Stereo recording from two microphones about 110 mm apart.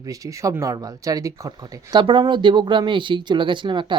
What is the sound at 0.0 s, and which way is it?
Speech, 30° right (ahead or behind).